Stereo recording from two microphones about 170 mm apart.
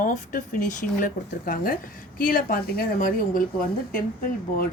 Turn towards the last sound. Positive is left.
turn(degrees=55)  # may be behind; listen again after turning